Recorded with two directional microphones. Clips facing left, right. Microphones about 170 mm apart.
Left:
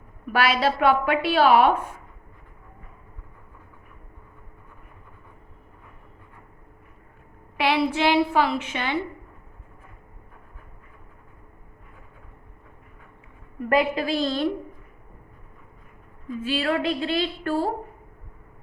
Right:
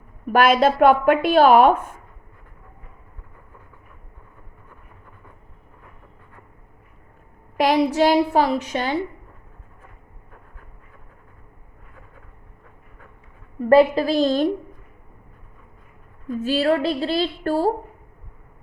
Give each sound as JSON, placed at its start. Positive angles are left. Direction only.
{"t": 0.3, "sound": "a woman's voice", "side_deg": -50}
{"t": 7.5, "sound": "a woman's voice", "side_deg": -40}
{"t": 13.6, "sound": "a woman's voice", "side_deg": -35}
{"t": 16.3, "sound": "a woman's voice", "side_deg": -45}